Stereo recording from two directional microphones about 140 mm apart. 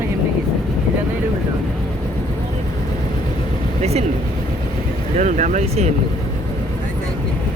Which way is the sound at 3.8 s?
50° right (ahead or behind).